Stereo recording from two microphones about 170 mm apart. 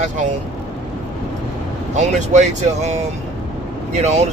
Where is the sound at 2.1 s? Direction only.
45° right (ahead or behind).